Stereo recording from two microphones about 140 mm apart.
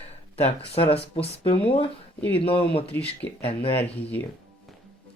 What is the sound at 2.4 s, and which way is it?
Speech, 40° left (ahead or behind).